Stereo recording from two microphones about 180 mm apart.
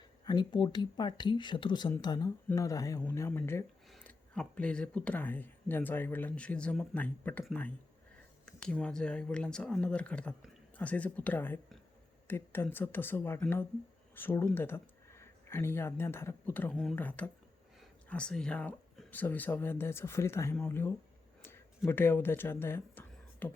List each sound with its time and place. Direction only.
0.3 s speech: 25° left (ahead or behind); by 7.4 s 10° left (ahead or behind)
8.4 s speech: 5° left (ahead or behind)